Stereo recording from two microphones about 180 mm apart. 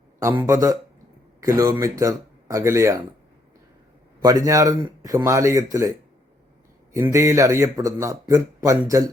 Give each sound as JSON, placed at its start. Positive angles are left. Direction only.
{"t": 0.2, "sound": "speech", "side_deg": -15}
{"t": 4.2, "sound": "speech", "side_deg": -20}